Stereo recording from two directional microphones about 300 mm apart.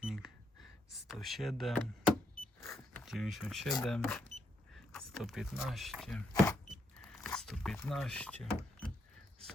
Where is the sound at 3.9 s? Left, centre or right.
Centre.